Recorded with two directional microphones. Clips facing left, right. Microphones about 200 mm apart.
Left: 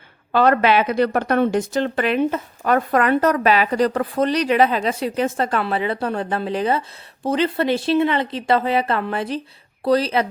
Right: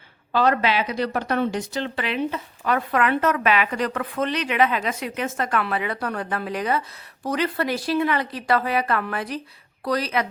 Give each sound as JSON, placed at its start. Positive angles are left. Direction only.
{"t": 0.3, "sound": "speech", "side_deg": 55}